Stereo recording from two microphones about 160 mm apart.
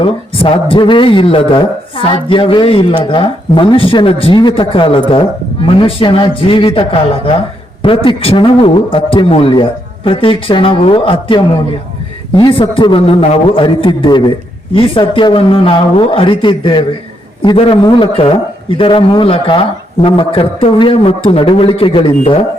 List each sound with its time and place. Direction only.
0.0 s a man's voice: 35° left (ahead or behind)